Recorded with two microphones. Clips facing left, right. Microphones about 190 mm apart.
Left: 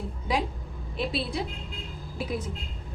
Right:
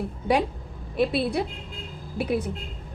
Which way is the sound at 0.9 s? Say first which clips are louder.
Right 7 dB; 55° right (ahead or behind).